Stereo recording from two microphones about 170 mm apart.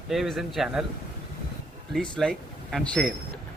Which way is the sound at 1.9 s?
Centre (ahead or behind).